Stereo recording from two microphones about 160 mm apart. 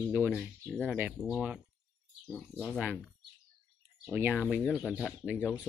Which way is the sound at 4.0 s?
10° right (ahead or behind).